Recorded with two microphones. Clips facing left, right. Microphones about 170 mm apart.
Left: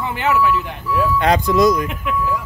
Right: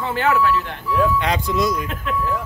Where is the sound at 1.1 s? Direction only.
45° left (ahead or behind).